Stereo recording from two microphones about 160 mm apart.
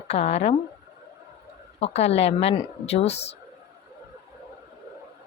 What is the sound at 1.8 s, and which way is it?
A woman's voice, 40° left (ahead or behind).